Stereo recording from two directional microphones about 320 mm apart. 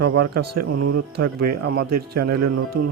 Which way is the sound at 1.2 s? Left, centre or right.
Right.